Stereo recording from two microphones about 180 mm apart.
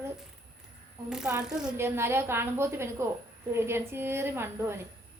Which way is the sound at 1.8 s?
15° right (ahead or behind).